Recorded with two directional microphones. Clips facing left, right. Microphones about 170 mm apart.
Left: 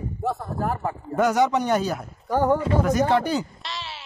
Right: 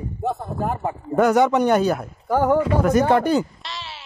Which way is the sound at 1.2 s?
55° right (ahead or behind).